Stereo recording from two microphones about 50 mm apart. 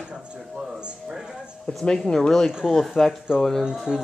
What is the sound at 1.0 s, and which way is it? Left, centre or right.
Speech, centre.